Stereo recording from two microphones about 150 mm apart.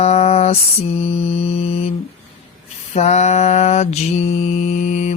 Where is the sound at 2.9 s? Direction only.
45° left (ahead or behind).